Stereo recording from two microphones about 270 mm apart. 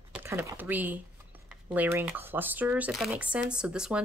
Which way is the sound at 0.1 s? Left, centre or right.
Centre.